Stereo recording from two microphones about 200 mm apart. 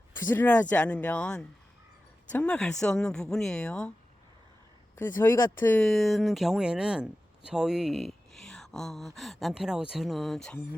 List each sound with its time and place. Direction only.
0.2 s speech: 10° left (ahead or behind)
4.9 s speech: 10° left (ahead or behind)